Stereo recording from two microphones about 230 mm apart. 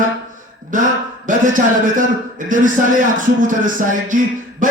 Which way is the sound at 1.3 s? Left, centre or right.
Right.